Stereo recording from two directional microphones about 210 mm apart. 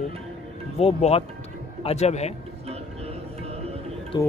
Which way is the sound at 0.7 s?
30° left (ahead or behind).